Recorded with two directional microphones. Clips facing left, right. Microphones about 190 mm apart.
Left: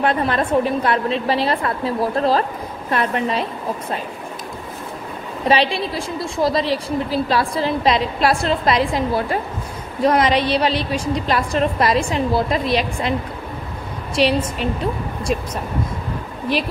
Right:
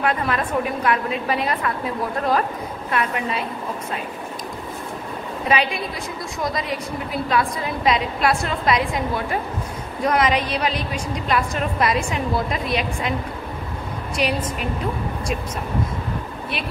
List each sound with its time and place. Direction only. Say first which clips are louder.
0.0 s a woman's voice: left 3 dB; 30° left (ahead or behind)
5.5 s a woman's voice: left 4 dB; 30° left (ahead or behind)
14.1 s a woman's voice: left 6 dB; 30° left (ahead or behind)